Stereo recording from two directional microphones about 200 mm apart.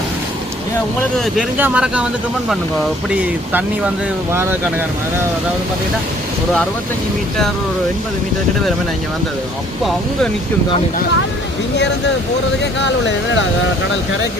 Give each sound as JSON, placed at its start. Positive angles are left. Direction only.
{"t": 1.1, "sound": "speech", "side_deg": 0}
{"t": 3.5, "sound": "speech", "side_deg": -10}
{"t": 12.8, "sound": "speech", "side_deg": 65}